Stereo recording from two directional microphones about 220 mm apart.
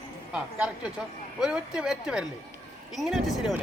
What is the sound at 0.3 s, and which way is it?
Speech, 5° right (ahead or behind).